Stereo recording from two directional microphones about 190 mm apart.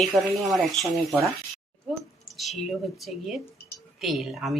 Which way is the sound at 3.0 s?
Centre (ahead or behind).